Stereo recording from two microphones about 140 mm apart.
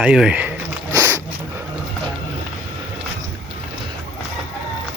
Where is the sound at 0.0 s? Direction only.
5° right (ahead or behind).